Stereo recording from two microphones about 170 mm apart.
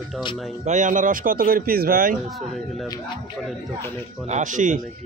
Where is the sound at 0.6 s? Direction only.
45° right (ahead or behind).